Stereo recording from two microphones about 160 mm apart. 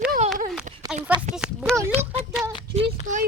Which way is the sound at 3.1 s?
50° right (ahead or behind).